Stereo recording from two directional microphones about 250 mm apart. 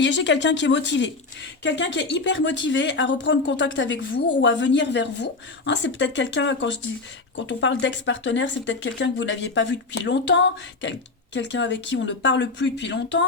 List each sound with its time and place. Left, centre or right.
0.0 s speech: left